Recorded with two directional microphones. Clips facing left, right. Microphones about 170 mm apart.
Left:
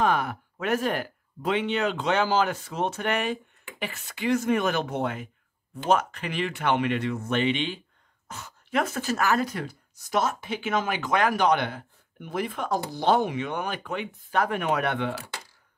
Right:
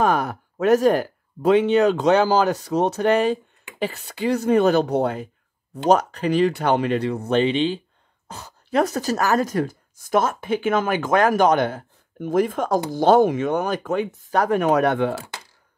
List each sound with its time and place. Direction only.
0.0 s speech: 40° right (ahead or behind)